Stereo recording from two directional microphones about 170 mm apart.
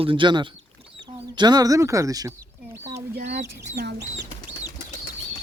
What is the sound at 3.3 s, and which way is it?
Speech, 75° right (ahead or behind).